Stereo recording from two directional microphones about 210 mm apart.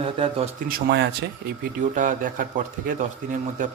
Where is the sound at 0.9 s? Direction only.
50° right (ahead or behind).